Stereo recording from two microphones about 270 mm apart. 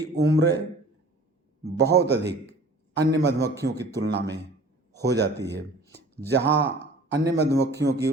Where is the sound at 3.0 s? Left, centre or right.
Right.